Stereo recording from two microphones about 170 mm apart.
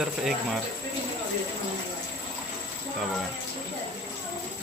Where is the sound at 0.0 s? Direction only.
5° right (ahead or behind).